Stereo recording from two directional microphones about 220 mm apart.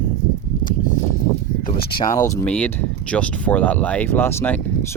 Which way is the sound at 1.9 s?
15° left (ahead or behind).